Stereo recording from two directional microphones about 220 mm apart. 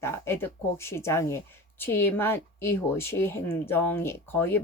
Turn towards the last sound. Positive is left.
turn(degrees=10)  # may be behind; listen again after turning